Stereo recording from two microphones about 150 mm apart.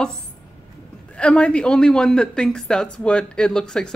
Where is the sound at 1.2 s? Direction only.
10° left (ahead or behind).